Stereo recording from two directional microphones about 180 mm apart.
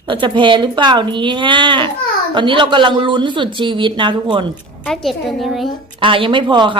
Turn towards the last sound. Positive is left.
turn(degrees=-25)  # may be behind; listen again after turning